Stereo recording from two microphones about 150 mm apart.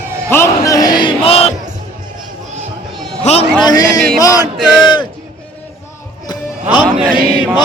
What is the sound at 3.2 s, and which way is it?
Speech, 45° left (ahead or behind).